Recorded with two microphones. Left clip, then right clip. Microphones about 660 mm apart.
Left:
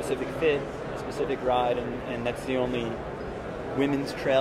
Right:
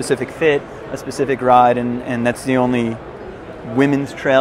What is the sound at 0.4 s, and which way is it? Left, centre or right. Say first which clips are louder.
Speech: right 8 dB; right.